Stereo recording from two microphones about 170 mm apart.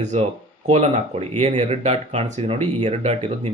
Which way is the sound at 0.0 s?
45° right (ahead or behind).